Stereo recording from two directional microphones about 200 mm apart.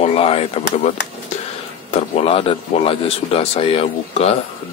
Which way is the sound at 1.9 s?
30° left (ahead or behind).